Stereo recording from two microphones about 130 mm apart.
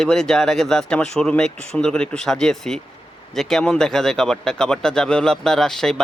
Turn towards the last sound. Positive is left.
turn(degrees=5)  # may be behind; listen again after turning